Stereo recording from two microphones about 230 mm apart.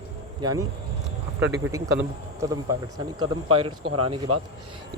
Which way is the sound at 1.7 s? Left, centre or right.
Centre.